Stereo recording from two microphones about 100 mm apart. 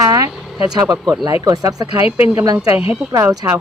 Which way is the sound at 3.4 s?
25° right (ahead or behind).